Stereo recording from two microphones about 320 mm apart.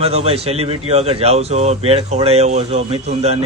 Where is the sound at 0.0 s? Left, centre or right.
Centre.